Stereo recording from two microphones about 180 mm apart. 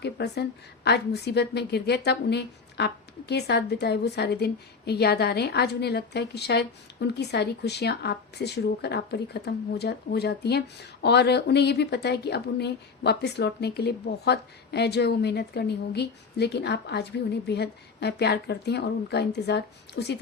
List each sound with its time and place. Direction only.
0.0 s a woman's voice: 65° left (ahead or behind)